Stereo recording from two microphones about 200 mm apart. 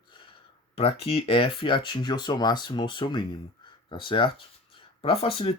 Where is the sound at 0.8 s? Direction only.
30° left (ahead or behind).